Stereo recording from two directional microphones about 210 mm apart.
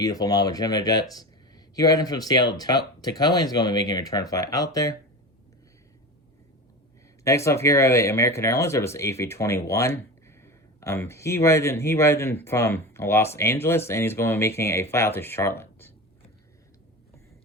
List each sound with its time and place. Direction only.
0.0 s speech: 15° left (ahead or behind)
7.3 s speech: 15° left (ahead or behind)